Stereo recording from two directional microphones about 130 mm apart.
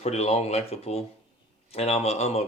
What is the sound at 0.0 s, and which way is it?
Speech, 55° left (ahead or behind).